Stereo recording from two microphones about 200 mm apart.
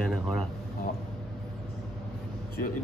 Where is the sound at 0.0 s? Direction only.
5° left (ahead or behind).